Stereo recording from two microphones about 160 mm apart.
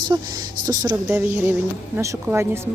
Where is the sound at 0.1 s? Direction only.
20° right (ahead or behind).